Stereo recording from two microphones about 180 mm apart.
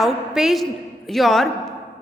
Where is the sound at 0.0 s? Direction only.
Centre (ahead or behind).